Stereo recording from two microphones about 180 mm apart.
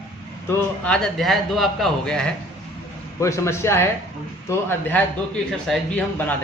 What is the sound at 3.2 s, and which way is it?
Speech, 15° left (ahead or behind).